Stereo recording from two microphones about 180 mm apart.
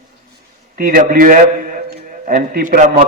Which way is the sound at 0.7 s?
50° right (ahead or behind).